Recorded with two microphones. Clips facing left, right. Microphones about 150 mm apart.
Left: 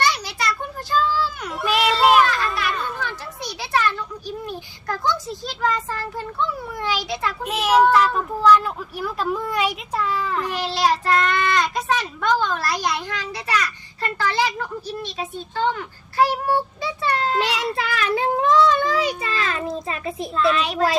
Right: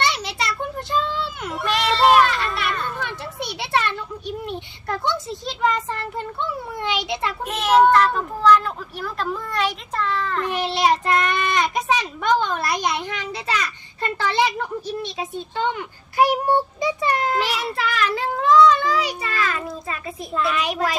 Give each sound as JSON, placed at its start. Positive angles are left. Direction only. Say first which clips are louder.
{"t": 0.0, "sound": "a sound", "louder": "left 1 dB", "side_deg": -25}
{"t": 1.5, "sound": "a sound", "louder": "even", "side_deg": 5}
{"t": 2.5, "sound": "children playing", "louder": "even", "side_deg": 0}
{"t": 3.0, "sound": "children playing", "louder": "right 1 dB", "side_deg": -25}
{"t": 4.4, "sound": "a child's voice", "louder": "right 1 dB", "side_deg": -25}
{"t": 7.4, "sound": "a child's voice", "louder": "right 1 dB", "side_deg": 5}
{"t": 10.5, "sound": "a child's voice", "louder": "right 2 dB", "side_deg": -20}
{"t": 17.7, "sound": "a child's voice", "louder": "left 1 dB", "side_deg": 25}
{"t": 20.3, "sound": "a child's voice", "louder": "left 2 dB", "side_deg": -10}